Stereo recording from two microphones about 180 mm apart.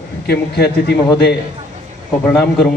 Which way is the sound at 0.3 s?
65° left (ahead or behind).